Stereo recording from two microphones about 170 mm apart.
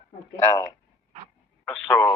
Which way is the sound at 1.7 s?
10° left (ahead or behind).